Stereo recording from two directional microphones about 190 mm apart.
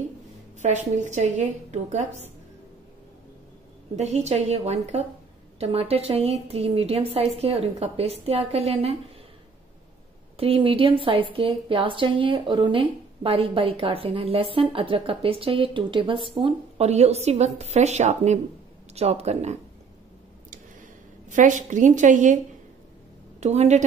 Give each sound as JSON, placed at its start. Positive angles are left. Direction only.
{"t": 0.6, "sound": "a woman's voice", "side_deg": -40}
{"t": 3.9, "sound": "a woman's voice", "side_deg": -35}
{"t": 10.3, "sound": "a woman's voice", "side_deg": -30}
{"t": 21.3, "sound": "a woman's voice", "side_deg": -40}
{"t": 23.4, "sound": "a woman's voice", "side_deg": -35}